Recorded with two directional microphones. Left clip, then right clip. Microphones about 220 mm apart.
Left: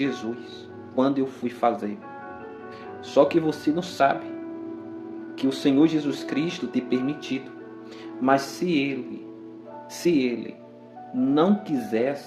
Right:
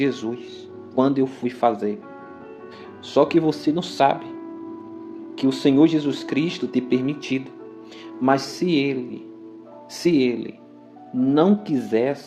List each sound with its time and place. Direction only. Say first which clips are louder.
0.0 s speech: right 4 dB; 25° right (ahead or behind)
3.1 s speech: right 2 dB; 25° right (ahead or behind)
5.4 s speech: right 4 dB; 25° right (ahead or behind)
10.0 s speech: right 3 dB; 25° right (ahead or behind)